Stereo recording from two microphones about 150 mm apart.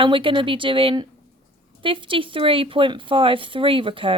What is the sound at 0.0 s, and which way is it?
A woman's voice, 35° right (ahead or behind).